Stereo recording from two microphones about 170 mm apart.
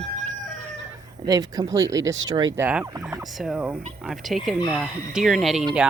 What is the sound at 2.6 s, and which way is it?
Speech, 10° right (ahead or behind).